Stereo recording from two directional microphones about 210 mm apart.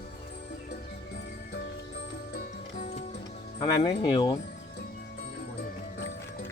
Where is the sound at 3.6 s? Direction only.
20° left (ahead or behind).